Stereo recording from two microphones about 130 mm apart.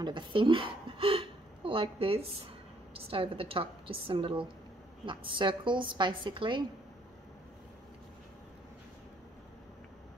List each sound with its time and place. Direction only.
0.0 s a woman's voice: 40° right (ahead or behind)